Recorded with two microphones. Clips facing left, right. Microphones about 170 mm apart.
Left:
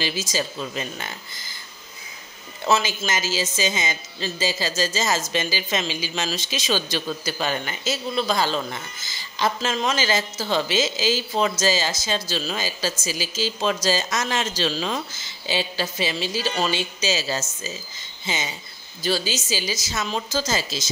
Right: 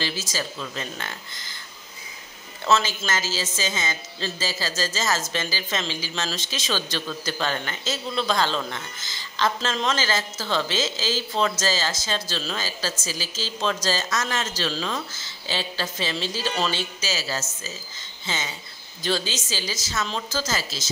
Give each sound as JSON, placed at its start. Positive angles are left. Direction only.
{"t": 0.0, "sound": "a woman's voice", "side_deg": 15}
{"t": 2.6, "sound": "a woman's voice", "side_deg": 15}
{"t": 17.0, "sound": "a woman's voice", "side_deg": 20}